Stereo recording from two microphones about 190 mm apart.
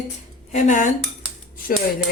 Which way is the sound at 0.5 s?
40° left (ahead or behind).